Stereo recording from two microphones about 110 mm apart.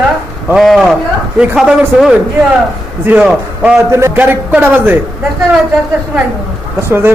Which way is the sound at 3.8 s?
25° right (ahead or behind).